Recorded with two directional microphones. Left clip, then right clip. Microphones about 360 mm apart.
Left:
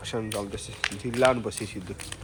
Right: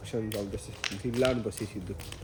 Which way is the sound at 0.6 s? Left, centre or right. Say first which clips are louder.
Left 5 dB; centre.